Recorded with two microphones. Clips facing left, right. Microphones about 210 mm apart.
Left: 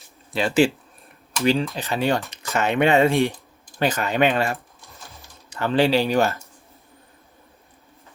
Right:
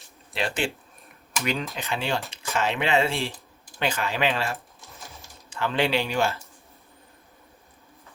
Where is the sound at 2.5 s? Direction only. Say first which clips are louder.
Left 6 dB; 60° left (ahead or behind); by 4.3 s 45° left (ahead or behind).